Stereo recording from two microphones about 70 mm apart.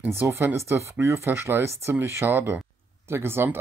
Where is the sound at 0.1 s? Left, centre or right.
Right.